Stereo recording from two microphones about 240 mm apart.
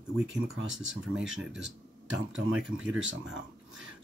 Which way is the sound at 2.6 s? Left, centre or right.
Centre.